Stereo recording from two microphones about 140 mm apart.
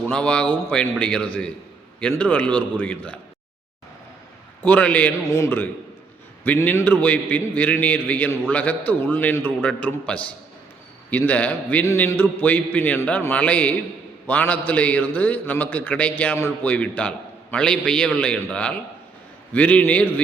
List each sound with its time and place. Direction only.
0.1 s a man's voice: 10° left (ahead or behind)
4.6 s a man's voice: 10° left (ahead or behind)